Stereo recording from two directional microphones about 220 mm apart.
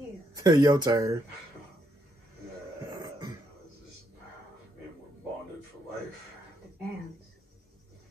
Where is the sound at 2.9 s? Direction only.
15° right (ahead or behind).